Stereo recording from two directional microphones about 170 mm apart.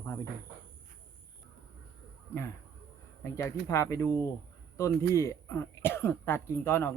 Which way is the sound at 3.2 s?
15° left (ahead or behind).